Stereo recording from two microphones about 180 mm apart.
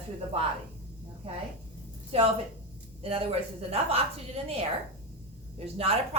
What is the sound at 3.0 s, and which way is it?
A woman's voice, 35° right (ahead or behind).